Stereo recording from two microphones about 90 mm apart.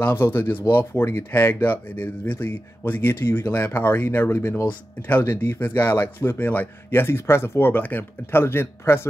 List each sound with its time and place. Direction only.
0.0 s speech: 25° left (ahead or behind)